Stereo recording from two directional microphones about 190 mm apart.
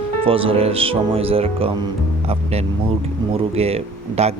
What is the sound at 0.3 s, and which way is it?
Speech, 30° right (ahead or behind).